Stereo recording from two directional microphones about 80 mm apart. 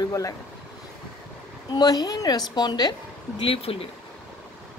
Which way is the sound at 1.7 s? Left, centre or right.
Left.